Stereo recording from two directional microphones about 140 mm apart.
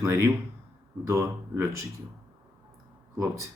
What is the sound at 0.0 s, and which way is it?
Speech, 20° right (ahead or behind).